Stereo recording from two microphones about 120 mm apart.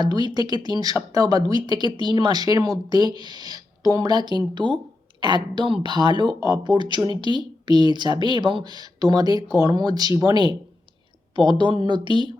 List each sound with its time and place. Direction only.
0.0 s speech: 35° right (ahead or behind)
11.3 s speech: 40° right (ahead or behind)